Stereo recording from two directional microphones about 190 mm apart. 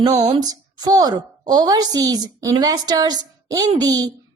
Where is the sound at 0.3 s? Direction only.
20° right (ahead or behind).